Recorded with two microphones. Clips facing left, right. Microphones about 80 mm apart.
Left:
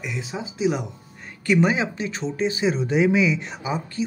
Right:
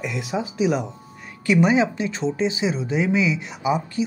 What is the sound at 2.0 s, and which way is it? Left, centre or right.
Speech, right.